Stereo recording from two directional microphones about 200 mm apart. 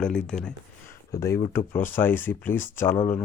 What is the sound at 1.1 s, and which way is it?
Speech, 15° left (ahead or behind).